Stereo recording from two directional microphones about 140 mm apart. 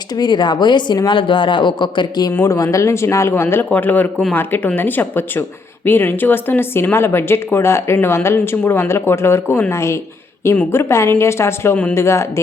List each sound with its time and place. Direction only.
0.1 s speech: 30° left (ahead or behind)
2.3 s speech: 20° left (ahead or behind)